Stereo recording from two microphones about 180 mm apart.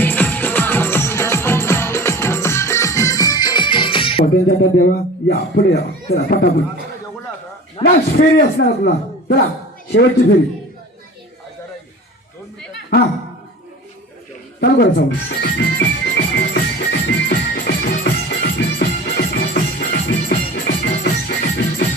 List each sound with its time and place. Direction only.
0.0 s music: 10° left (ahead or behind); by 4.3 s 30° left (ahead or behind)
4.4 s a man's voice: 60° left (ahead or behind)
7.8 s a man's voice: 30° left (ahead or behind)
8.1 s a man's voice: 65° left (ahead or behind)
9.9 s speech: 90° left
14.6 s music: 65° left (ahead or behind)
20.7 s music: 65° left (ahead or behind)